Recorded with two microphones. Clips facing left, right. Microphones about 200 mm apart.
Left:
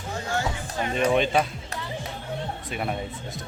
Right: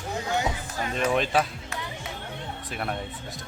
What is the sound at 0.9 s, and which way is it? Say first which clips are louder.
Speech: left 2 dB; centre (ahead or behind).